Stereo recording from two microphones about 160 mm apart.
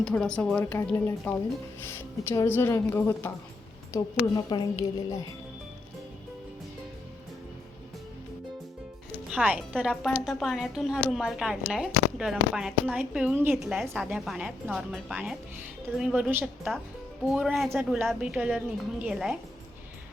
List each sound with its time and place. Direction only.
0.0 s a woman's voice: 5° left (ahead or behind); by 4.9 s 25° left (ahead or behind)
9.3 s a woman's voice: 5° right (ahead or behind)
13.6 s a woman's voice: centre (ahead or behind)